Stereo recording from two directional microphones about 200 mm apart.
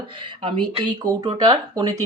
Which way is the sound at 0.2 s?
25° right (ahead or behind).